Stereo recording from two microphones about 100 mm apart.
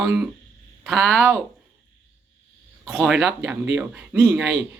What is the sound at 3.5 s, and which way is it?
Speech, 15° right (ahead or behind).